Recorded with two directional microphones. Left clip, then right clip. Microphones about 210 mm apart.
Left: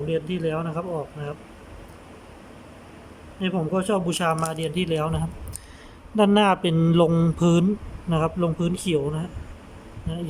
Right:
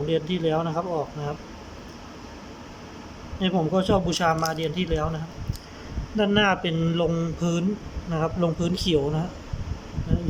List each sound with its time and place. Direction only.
0.1 s speech: centre (ahead or behind)
3.4 s speech: 5° left (ahead or behind)